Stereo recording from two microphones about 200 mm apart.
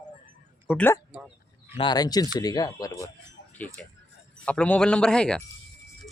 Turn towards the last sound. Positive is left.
turn(degrees=5)  # may be behind; listen again after turning